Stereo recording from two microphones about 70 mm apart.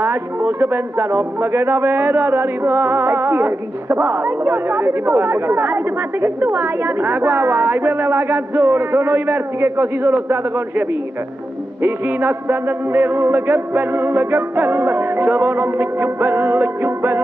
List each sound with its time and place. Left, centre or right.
0.0 s a man's voice: right
11.8 s a man's voice: right